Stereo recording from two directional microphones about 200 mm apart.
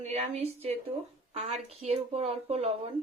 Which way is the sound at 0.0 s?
30° right (ahead or behind).